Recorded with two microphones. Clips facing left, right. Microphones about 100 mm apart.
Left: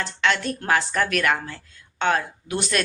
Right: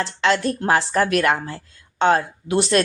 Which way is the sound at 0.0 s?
30° right (ahead or behind).